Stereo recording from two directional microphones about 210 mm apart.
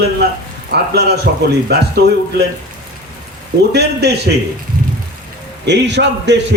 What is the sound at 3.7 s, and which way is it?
Speech, 50° right (ahead or behind).